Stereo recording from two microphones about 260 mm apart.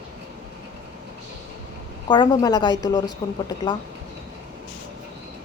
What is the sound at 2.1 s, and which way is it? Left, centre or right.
Speech, centre.